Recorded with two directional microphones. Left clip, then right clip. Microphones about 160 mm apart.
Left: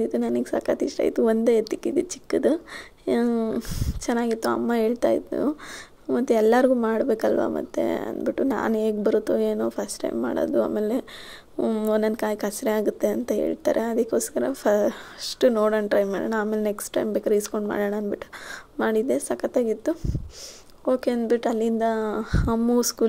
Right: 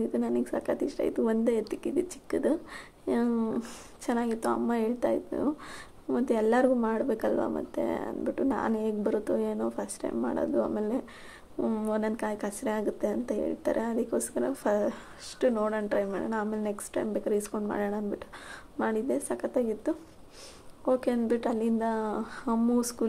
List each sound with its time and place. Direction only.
0.0 s speech: 20° left (ahead or behind)